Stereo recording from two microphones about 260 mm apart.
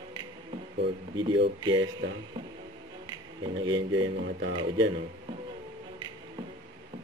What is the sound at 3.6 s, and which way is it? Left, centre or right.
Speech, centre.